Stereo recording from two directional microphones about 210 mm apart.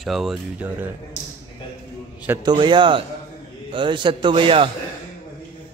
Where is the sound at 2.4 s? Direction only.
20° right (ahead or behind).